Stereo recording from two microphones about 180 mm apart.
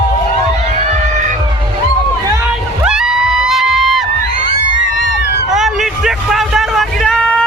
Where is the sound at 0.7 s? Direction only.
40° right (ahead or behind).